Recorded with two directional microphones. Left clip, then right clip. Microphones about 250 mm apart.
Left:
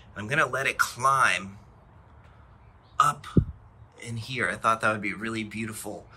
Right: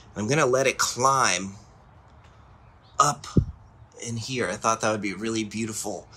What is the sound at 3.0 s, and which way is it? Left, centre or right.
Speech, centre.